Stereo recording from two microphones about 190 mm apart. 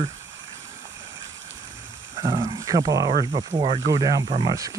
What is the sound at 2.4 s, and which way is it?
Speech, 20° right (ahead or behind).